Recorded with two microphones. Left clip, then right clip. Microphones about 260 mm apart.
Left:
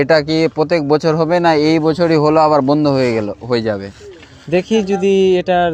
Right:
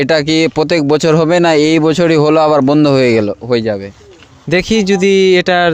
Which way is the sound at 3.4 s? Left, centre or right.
Right.